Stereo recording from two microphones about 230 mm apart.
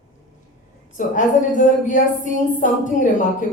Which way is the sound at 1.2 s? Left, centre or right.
Left.